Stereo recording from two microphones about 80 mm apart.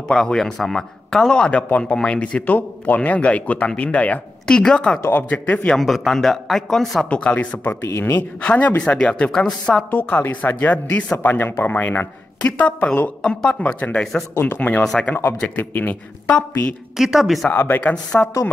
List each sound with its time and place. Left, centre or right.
0.1 s a man's voice: centre
5.8 s speech: centre
7.1 s a man's voice: centre
9.8 s a man's voice: left
14.8 s a man's voice: centre
15.4 s speech: left
16.9 s speech: centre
17.5 s a man's voice: left